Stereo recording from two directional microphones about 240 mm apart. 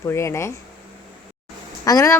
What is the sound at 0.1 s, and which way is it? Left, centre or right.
Speech, centre.